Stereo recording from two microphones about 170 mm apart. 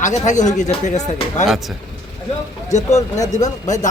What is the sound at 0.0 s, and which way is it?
Speech, 45° left (ahead or behind).